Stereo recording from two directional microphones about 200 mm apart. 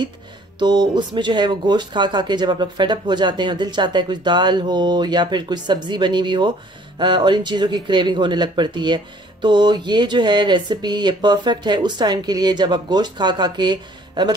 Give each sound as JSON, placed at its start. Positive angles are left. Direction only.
{"t": 0.6, "sound": "speech", "side_deg": -20}